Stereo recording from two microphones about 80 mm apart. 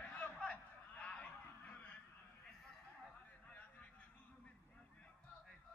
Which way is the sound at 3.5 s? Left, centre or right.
Centre.